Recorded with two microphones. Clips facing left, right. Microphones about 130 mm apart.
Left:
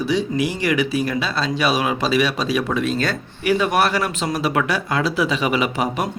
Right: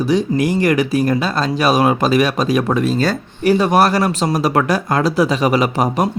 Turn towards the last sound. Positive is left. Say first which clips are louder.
# right 5 dB
turn(degrees=-40)  # may be behind; listen again after turning